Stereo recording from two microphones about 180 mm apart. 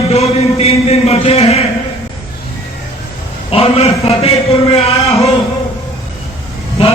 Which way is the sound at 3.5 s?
35° left (ahead or behind).